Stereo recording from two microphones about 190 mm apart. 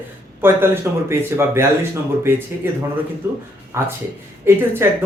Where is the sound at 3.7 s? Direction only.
15° right (ahead or behind).